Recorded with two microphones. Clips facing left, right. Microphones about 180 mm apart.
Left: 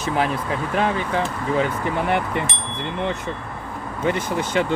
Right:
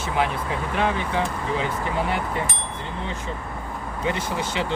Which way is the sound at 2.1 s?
60° left (ahead or behind).